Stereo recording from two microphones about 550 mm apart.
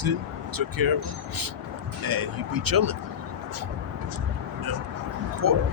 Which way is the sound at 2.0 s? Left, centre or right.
Right.